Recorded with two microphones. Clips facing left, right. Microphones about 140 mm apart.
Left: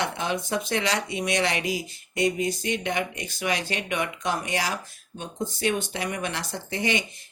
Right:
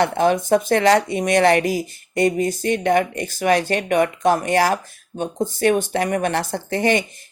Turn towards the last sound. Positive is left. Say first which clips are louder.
# right 8 dB
turn(degrees=-50)  # may be behind; listen again after turning